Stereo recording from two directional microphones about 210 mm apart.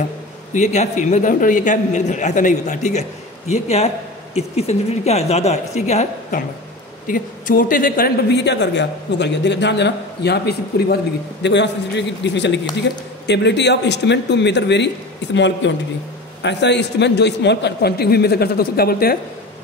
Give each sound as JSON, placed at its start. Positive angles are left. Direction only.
{"t": 0.5, "sound": "a man's voice", "side_deg": 35}